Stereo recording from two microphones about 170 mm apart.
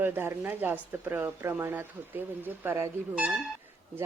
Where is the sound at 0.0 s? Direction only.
15° right (ahead or behind).